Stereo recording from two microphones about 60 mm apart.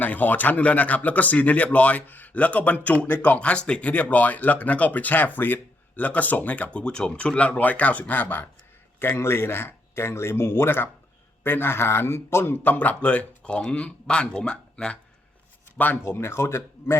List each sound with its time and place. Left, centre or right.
0.0 s speech: left
6.7 s speech: centre; by 8.4 s left
9.0 s speech: left; by 14.9 s centre
16.0 s speech: left